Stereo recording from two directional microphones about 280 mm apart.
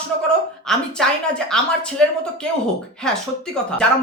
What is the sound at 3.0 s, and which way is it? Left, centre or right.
Speech, centre.